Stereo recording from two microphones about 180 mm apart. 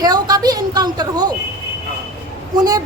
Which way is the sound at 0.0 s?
20° right (ahead or behind).